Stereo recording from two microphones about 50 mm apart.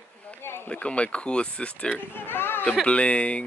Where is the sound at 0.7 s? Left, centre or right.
Left.